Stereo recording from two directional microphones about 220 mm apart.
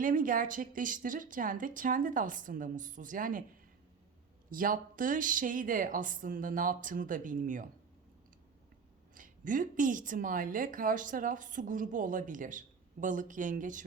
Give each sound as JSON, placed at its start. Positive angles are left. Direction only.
{"t": 0.0, "sound": "a woman's voice", "side_deg": -40}
{"t": 4.5, "sound": "a woman's voice", "side_deg": -40}
{"t": 9.1, "sound": "a woman's voice", "side_deg": -35}